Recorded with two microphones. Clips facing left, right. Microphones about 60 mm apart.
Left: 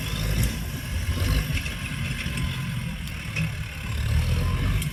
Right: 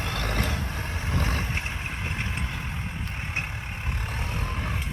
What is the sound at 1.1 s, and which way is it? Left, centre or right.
Vehicle, right.